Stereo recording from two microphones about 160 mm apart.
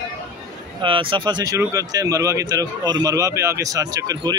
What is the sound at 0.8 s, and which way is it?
Speech, 30° right (ahead or behind).